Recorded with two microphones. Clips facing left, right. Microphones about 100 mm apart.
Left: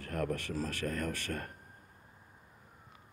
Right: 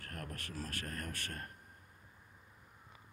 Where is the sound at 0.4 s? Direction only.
90° left.